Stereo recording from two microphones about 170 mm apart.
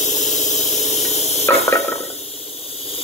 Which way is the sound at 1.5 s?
15° left (ahead or behind).